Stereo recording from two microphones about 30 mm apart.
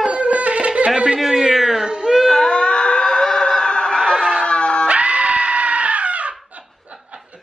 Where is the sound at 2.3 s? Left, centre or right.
Left.